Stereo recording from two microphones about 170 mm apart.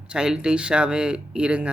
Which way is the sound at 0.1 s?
5° right (ahead or behind).